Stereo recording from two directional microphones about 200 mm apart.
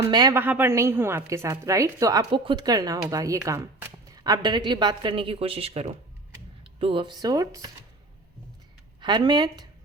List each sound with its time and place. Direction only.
0.1 s a woman's voice: 20° right (ahead or behind)
9.0 s a woman's voice: 20° right (ahead or behind)